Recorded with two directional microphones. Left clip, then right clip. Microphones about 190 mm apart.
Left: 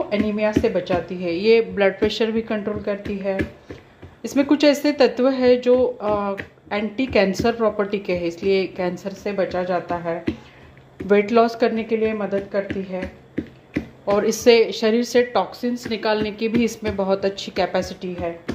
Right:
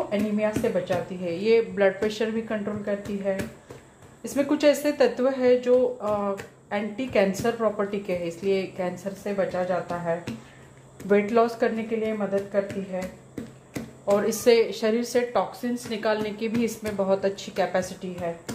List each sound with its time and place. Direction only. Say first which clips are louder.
0.1 s speech: left 5 dB; 40° left (ahead or behind)
14.1 s speech: left 5 dB; 30° left (ahead or behind)